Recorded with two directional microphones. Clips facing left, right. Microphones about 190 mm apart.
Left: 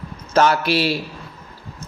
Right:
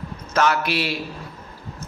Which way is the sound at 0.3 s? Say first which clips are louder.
Left 4 dB; 30° left (ahead or behind).